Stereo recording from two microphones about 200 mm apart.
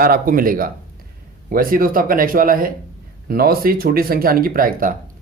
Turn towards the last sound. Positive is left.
turn(degrees=-45)  # may be behind; listen again after turning